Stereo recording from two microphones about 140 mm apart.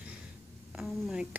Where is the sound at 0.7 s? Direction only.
Centre (ahead or behind).